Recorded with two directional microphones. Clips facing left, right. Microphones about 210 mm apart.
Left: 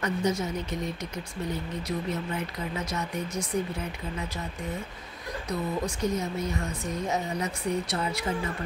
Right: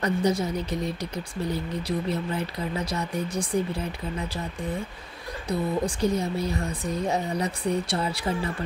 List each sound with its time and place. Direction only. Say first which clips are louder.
0.0 s speech: right 3 dB; 35° right (ahead or behind)
1.5 s speech: right 3 dB; 35° right (ahead or behind)
5.5 s speech: right 4 dB; 30° right (ahead or behind)